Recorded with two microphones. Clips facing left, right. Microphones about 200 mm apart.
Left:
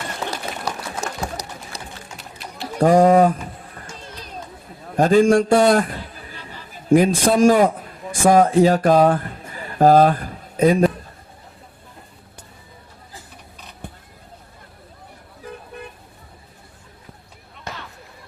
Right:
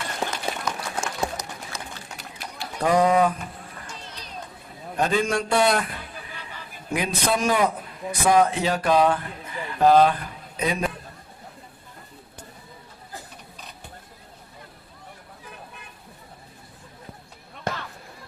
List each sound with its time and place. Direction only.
0.3 s run: 35° left (ahead or behind)
4.9 s a man's voice: 45° left (ahead or behind)
13.8 s a sound: 55° left (ahead or behind)